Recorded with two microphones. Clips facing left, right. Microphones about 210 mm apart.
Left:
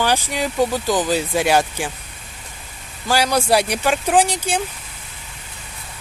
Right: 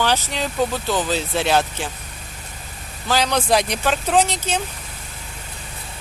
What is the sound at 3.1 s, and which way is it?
Speech, 10° left (ahead or behind).